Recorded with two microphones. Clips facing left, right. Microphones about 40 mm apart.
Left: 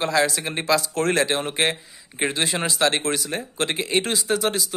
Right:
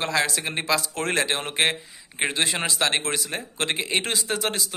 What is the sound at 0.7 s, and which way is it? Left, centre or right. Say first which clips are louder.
A man's voice: left 4 dB; right.